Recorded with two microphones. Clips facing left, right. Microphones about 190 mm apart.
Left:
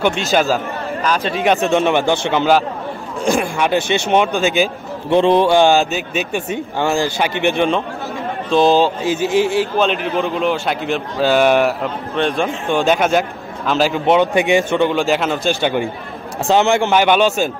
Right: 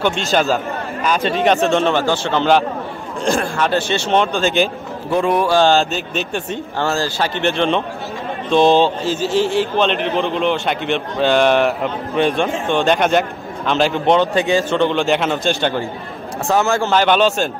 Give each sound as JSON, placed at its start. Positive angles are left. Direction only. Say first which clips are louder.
{"t": 0.3, "sound": "speech", "louder": "left 1 dB", "side_deg": 5}
{"t": 5.1, "sound": "a man's voice", "louder": "left 4 dB", "side_deg": 25}
{"t": 5.6, "sound": "a man's voice", "louder": "left 1 dB", "side_deg": 10}
{"t": 16.4, "sound": "speech", "louder": "left 3 dB", "side_deg": 20}